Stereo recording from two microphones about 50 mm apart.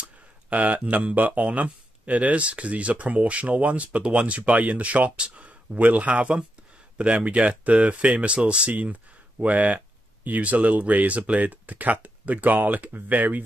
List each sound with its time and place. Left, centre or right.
0.0 s speech: right
5.8 s speech: right